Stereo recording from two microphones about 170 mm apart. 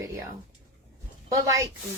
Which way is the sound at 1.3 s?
20° right (ahead or behind).